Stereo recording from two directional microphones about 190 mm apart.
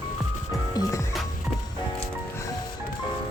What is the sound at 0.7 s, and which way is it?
Music, 20° left (ahead or behind).